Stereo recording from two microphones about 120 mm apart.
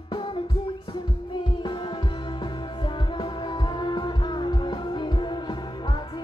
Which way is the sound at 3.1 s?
40° left (ahead or behind).